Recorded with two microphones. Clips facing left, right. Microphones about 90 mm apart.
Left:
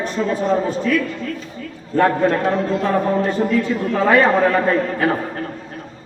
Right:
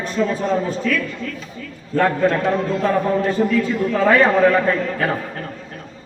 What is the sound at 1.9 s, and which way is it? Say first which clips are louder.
A man's voice: left 1 dB; 25° left (ahead or behind).